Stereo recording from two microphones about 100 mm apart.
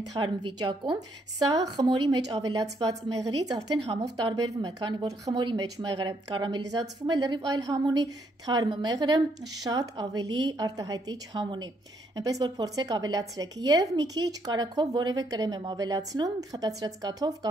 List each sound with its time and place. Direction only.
0.2 s a woman's voice: 50° right (ahead or behind)